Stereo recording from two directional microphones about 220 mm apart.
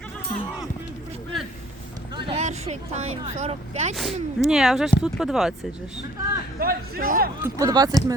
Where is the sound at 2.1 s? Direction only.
30° right (ahead or behind).